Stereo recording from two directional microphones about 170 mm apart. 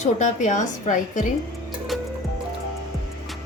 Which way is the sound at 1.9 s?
Centre (ahead or behind).